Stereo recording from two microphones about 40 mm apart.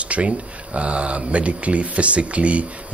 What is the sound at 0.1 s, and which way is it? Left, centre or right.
Speech, right.